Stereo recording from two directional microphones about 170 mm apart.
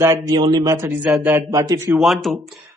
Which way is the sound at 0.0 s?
20° right (ahead or behind).